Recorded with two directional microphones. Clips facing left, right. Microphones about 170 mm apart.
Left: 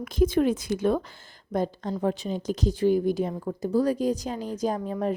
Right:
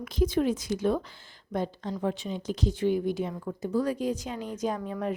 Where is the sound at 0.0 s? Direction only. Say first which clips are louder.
Left 4 dB; 50° left (ahead or behind).